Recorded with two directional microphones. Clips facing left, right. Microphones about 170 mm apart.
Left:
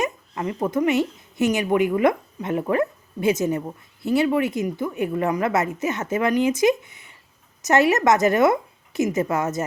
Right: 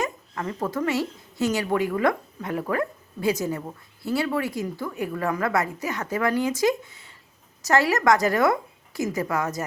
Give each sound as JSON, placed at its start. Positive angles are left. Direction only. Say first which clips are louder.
{"t": 0.0, "sound": "a woman's voice", "louder": "left 3 dB", "side_deg": 20}